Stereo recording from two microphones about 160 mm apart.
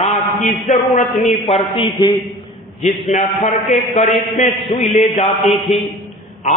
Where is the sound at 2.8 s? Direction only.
50° left (ahead or behind).